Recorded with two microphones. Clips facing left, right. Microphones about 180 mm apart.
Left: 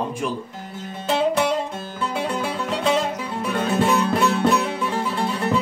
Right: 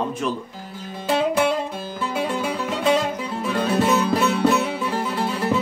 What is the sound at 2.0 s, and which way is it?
Music, 5° right (ahead or behind).